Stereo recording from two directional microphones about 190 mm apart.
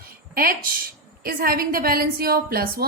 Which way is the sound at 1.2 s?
50° right (ahead or behind).